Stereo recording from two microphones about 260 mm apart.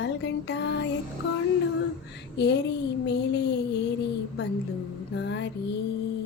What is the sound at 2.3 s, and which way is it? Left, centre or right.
Speech, left.